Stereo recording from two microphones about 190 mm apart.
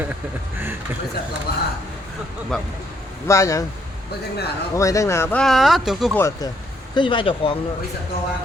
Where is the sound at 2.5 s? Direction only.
Centre (ahead or behind).